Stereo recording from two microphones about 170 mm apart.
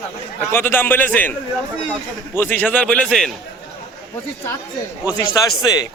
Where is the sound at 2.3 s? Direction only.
10° left (ahead or behind).